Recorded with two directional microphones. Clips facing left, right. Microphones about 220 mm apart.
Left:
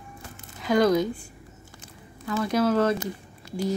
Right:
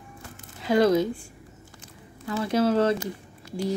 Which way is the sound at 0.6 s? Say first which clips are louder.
Right 1 dB; 30° right (ahead or behind).